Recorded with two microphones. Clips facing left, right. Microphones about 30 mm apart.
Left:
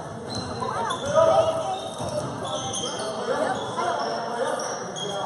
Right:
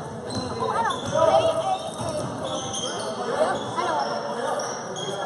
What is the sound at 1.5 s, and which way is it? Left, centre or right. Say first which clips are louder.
Music: right 2 dB; right.